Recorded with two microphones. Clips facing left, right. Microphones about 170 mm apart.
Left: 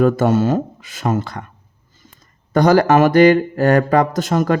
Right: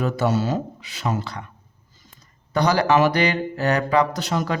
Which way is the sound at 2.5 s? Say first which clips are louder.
Left 6 dB; 50° left (ahead or behind).